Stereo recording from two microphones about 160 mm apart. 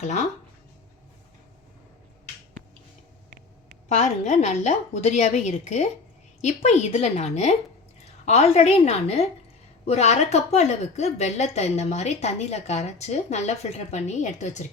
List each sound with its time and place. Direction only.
3.8 s a woman's voice: 45° left (ahead or behind)